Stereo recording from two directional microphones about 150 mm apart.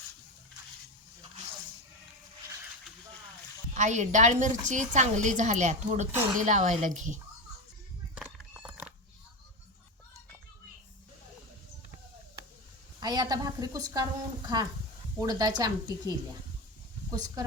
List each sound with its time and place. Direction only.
3.8 s a woman's voice: 50° right (ahead or behind)
8.1 s cat: 5° right (ahead or behind)
13.0 s a woman's voice: 25° right (ahead or behind)